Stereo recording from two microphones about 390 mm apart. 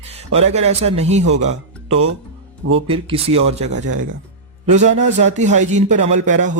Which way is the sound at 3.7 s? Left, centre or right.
Right.